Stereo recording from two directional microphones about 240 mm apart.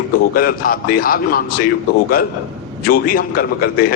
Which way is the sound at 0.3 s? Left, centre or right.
Left.